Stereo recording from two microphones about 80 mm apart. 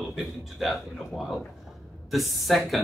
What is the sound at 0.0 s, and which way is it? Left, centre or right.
Speech, centre.